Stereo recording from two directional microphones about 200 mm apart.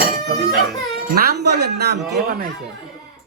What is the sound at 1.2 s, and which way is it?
Speech, 55° right (ahead or behind).